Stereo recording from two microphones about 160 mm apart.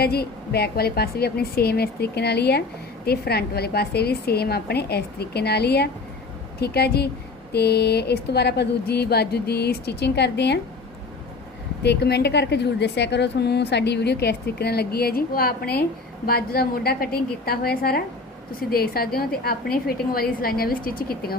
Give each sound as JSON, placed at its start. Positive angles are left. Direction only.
{"t": 0.0, "sound": "a woman's voice", "side_deg": 80}
{"t": 11.8, "sound": "a woman's voice", "side_deg": 90}